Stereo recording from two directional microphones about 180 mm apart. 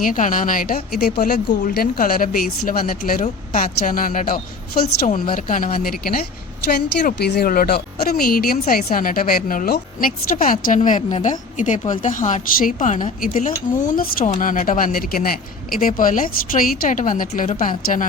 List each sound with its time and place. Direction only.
0.0 s a woman's voice: 45° left (ahead or behind)